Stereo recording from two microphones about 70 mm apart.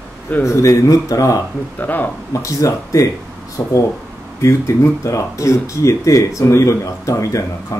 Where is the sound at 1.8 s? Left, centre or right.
Left.